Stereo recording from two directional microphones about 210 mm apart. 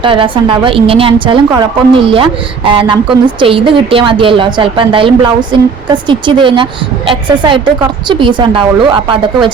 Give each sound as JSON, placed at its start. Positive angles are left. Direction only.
{"t": 0.0, "sound": "a woman's voice", "side_deg": -25}